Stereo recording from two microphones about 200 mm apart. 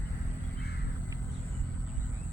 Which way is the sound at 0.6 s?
55° left (ahead or behind).